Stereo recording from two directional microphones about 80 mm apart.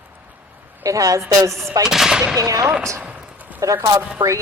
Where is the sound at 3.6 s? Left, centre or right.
Right.